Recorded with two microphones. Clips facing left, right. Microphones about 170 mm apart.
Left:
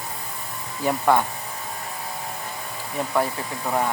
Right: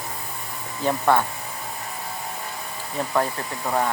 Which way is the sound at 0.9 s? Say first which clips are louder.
Even; 10° left (ahead or behind).